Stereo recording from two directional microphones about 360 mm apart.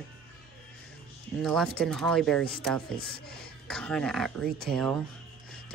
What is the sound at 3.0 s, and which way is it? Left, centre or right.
Speech, left.